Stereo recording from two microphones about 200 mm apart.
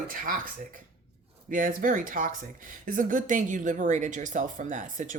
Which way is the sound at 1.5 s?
45° right (ahead or behind).